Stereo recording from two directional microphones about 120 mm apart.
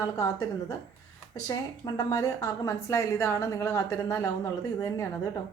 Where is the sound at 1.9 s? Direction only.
30° left (ahead or behind).